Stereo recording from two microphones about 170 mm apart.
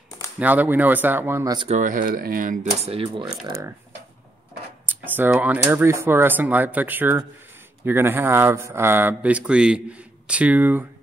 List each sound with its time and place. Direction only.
0.4 s speech: 10° right (ahead or behind)
1.7 s speech: 50° right (ahead or behind); by 3.3 s 35° right (ahead or behind)
4.8 s speech: 10° right (ahead or behind)